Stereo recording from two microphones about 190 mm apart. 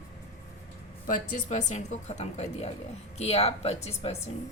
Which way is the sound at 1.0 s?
40° left (ahead or behind).